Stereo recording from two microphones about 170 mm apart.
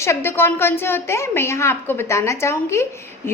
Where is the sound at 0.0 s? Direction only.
15° left (ahead or behind).